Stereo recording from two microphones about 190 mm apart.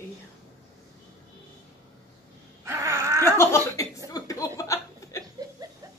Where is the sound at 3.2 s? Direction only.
15° left (ahead or behind).